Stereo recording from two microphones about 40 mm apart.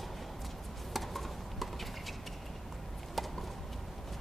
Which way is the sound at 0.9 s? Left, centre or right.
Centre.